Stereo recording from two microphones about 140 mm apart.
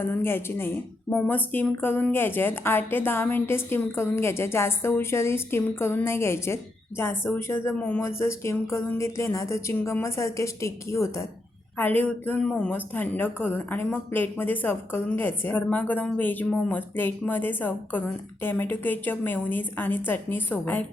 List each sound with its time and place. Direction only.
0.0 s a woman's voice: 15° left (ahead or behind)